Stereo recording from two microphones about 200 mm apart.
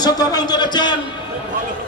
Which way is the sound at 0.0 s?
20° left (ahead or behind).